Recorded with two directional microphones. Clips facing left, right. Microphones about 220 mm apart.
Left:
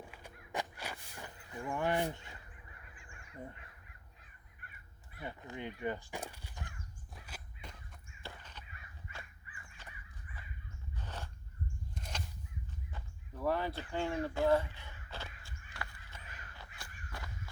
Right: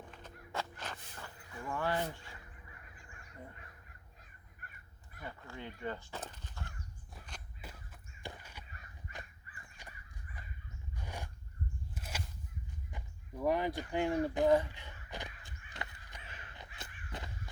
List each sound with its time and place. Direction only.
0.1 s walk: 10° left (ahead or behind)
4.6 s crow: 40° right (ahead or behind)
5.2 s speech: 20° left (ahead or behind)
7.1 s walk: 5° left (ahead or behind)
7.6 s a sound: 5° right (ahead or behind)
8.2 s crow: 10° right (ahead or behind)
9.8 s crow: 15° right (ahead or behind)
10.9 s biting: 10° right (ahead or behind)
11.9 s a sound: 5° right (ahead or behind)